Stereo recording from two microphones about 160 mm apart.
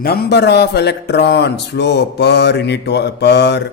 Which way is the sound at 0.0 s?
75° left (ahead or behind).